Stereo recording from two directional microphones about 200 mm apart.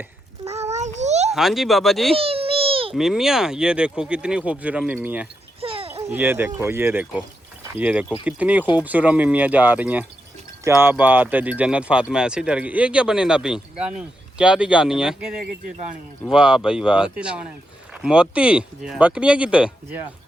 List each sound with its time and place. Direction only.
0.7 s a sound: 35° right (ahead or behind)
1.3 s speech: centre (ahead or behind)
2.1 s babbling: 30° right (ahead or behind)
2.9 s speech: centre (ahead or behind)
5.5 s a sound: 30° right (ahead or behind)
6.1 s speech: 10° right (ahead or behind)